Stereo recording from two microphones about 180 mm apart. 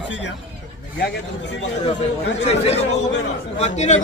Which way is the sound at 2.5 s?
35° left (ahead or behind).